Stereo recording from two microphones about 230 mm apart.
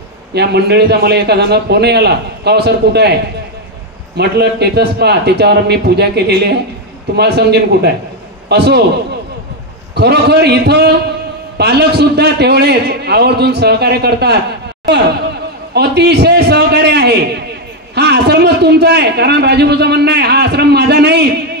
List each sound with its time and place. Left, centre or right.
0.3 s a man's voice: right
4.2 s a man's voice: right
9.9 s a man's voice: right
15.7 s a sound: right
17.9 s a man's voice: right